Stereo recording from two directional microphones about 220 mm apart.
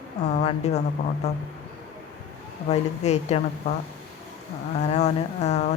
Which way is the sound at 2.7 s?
30° left (ahead or behind).